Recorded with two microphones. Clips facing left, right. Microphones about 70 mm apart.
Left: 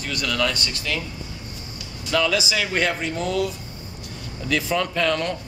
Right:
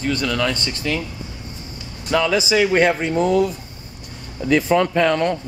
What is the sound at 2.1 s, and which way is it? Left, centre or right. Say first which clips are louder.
Speech: right 4 dB; centre.